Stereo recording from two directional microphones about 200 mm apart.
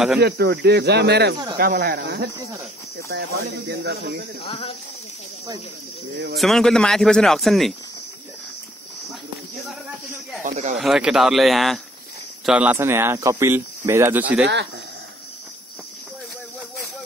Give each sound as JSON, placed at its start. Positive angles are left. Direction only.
{"t": 0.2, "sound": "cricket", "side_deg": -55}
{"t": 1.6, "sound": "speech", "side_deg": -50}
{"t": 4.5, "sound": "speech", "side_deg": 30}
{"t": 6.3, "sound": "speech", "side_deg": 0}
{"t": 10.4, "sound": "speech", "side_deg": -40}
{"t": 10.8, "sound": "speech", "side_deg": -5}
{"t": 14.4, "sound": "cricket", "side_deg": -60}